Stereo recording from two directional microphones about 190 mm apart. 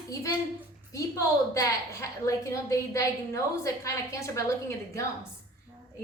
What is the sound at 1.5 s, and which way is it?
A woman's voice, 15° left (ahead or behind).